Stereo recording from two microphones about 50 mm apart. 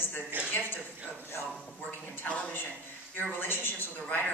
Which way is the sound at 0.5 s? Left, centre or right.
Left.